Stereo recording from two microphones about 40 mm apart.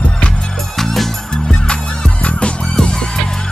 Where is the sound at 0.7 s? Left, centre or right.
Centre.